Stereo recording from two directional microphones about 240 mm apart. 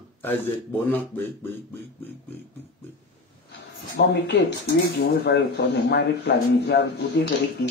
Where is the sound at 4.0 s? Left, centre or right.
Left.